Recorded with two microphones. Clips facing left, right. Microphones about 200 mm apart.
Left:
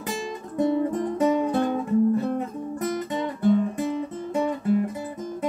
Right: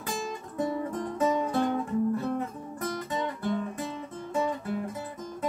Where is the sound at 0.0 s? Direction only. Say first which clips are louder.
Left 3 dB; 20° left (ahead or behind).